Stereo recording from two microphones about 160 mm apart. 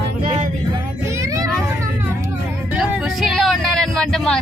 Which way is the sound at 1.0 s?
20° right (ahead or behind).